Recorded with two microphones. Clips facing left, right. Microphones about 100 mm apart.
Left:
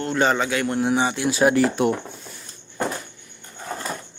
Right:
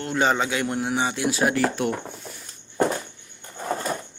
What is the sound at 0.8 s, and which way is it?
Speech, centre (ahead or behind).